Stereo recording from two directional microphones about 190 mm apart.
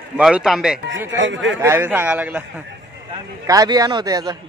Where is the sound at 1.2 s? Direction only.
75° right (ahead or behind).